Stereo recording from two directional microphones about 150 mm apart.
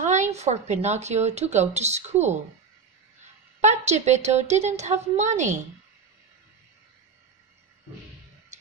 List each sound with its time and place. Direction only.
0.0 s a woman's voice: 55° right (ahead or behind)
3.6 s a woman's voice: 50° right (ahead or behind)